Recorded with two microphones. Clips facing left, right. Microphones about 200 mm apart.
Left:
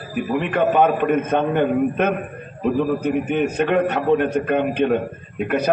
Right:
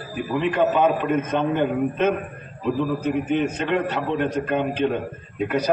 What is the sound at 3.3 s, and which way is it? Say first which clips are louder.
A man's voice: left 3 dB; 60° left (ahead or behind).